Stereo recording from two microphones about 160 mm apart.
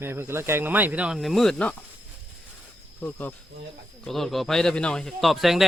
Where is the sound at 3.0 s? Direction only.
10° left (ahead or behind).